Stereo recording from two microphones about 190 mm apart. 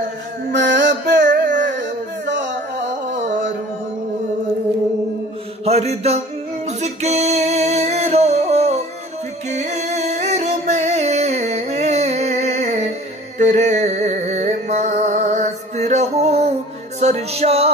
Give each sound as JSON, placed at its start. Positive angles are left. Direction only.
{"t": 0.5, "sound": "music", "side_deg": -70}
{"t": 1.2, "sound": "carnatic music", "side_deg": -45}
{"t": 1.7, "sound": "a sound", "side_deg": -70}
{"t": 3.1, "sound": "music", "side_deg": -40}
{"t": 5.7, "sound": "music", "side_deg": -35}